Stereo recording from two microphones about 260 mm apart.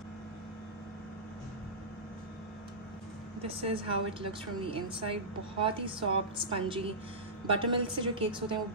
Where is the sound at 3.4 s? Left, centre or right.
Right.